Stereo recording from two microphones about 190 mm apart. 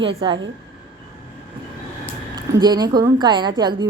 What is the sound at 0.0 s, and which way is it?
Speech, 30° right (ahead or behind).